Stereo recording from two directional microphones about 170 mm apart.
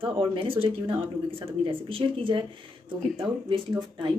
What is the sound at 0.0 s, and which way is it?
Speech, 30° right (ahead or behind).